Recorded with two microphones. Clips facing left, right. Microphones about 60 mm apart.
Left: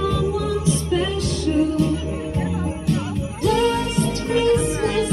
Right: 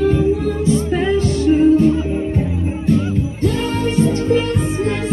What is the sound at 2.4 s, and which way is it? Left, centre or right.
Music, left.